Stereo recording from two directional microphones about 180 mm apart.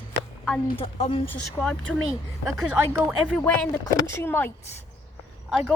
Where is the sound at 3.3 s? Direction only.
5° left (ahead or behind).